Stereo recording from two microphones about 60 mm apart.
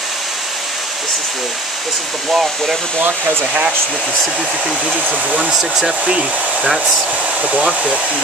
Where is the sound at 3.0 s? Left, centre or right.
Right.